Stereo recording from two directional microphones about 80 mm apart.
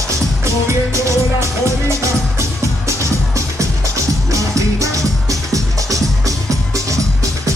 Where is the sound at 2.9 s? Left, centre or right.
Right.